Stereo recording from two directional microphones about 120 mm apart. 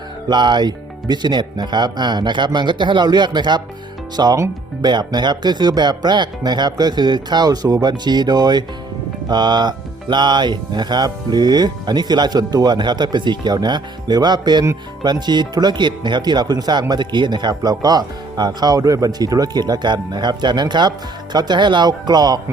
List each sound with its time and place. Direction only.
0.3 s speech: 40° right (ahead or behind)